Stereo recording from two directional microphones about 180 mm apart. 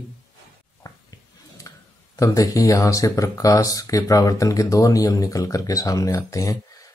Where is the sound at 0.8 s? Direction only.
20° left (ahead or behind).